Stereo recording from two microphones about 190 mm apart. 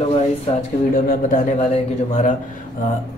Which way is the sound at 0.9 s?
45° left (ahead or behind).